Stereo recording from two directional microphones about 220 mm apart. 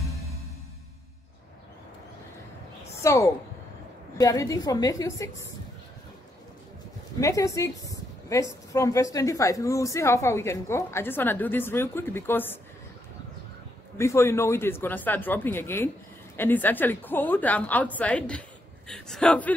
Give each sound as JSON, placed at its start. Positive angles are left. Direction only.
{"t": 3.0, "sound": "a woman's voice", "side_deg": 15}
{"t": 7.2, "sound": "a woman's voice", "side_deg": 15}
{"t": 13.9, "sound": "a woman's voice", "side_deg": 10}